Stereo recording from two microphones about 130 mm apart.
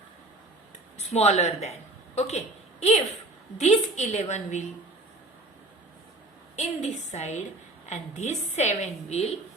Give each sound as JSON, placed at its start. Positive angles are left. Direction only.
{"t": 0.9, "sound": "speech", "side_deg": 55}
{"t": 3.6, "sound": "a woman's voice", "side_deg": 60}
{"t": 6.6, "sound": "a woman's voice", "side_deg": 60}